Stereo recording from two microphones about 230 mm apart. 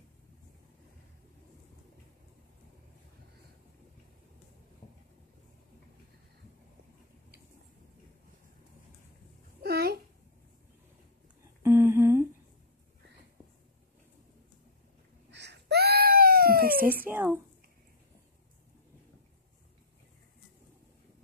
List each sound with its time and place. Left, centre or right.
9.6 s a sound: right
11.6 s humming: centre
15.3 s baby cry: right
17.0 s speech: centre